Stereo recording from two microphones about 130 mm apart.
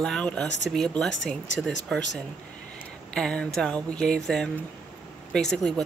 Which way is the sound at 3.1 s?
5° left (ahead or behind).